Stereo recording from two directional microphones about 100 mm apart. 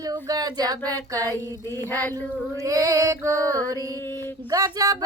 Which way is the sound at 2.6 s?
35° right (ahead or behind).